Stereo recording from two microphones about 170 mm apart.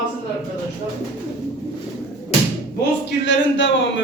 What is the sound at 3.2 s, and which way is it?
Speech, 90° left.